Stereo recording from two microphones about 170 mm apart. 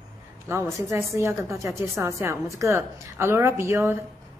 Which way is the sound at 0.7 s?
15° right (ahead or behind).